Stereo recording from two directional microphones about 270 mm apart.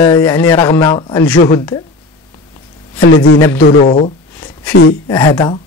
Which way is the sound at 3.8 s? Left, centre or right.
Left.